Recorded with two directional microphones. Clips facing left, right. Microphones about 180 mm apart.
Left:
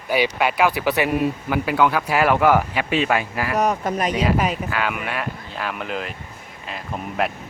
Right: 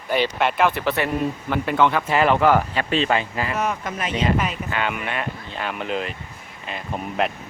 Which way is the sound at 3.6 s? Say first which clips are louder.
Left 8 dB; 40° left (ahead or behind).